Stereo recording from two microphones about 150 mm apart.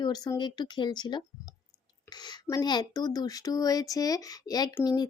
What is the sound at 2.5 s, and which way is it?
Speech, 25° left (ahead or behind).